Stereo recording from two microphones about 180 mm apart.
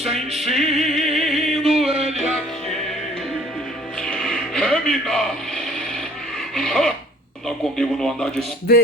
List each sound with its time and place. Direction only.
0.0 s music: centre (ahead or behind)
1.9 s music: 35° right (ahead or behind)
2.1 s music: centre (ahead or behind)
4.0 s music: 5° left (ahead or behind)
6.5 s a sound: 5° left (ahead or behind)
7.4 s speech: centre (ahead or behind)
8.7 s music: 60° left (ahead or behind)